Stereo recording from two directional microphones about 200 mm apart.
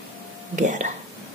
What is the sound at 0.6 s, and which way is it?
Speech, 40° right (ahead or behind).